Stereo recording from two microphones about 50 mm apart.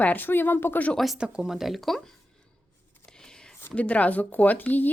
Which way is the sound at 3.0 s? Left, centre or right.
Centre.